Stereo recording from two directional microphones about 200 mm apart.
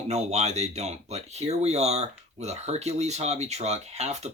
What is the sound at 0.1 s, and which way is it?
Speech, 35° right (ahead or behind).